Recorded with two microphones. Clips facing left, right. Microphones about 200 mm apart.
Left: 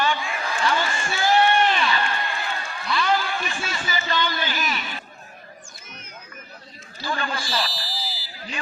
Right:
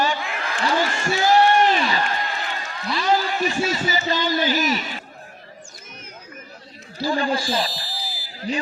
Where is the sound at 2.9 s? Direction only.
40° right (ahead or behind).